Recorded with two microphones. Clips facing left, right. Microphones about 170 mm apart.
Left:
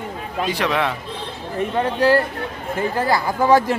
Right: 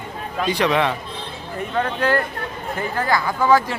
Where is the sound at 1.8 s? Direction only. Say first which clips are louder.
Left 3 dB; 25° left (ahead or behind).